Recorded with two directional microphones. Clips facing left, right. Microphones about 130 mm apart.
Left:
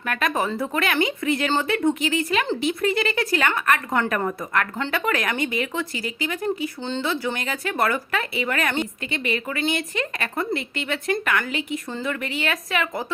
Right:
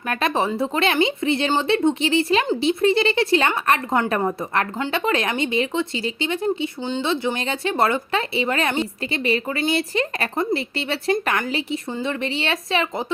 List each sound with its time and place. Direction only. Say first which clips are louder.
0.1 s speech: right 2 dB; 30° right (ahead or behind)